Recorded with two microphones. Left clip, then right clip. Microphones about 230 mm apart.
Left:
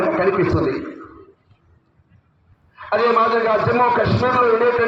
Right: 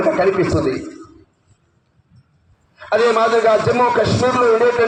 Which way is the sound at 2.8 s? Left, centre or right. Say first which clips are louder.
Right 2 dB; right.